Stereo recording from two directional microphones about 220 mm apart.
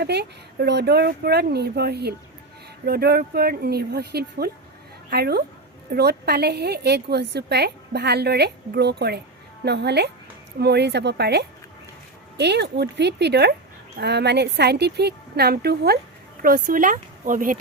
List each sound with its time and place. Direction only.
0.0 s a woman's voice: 50° right (ahead or behind)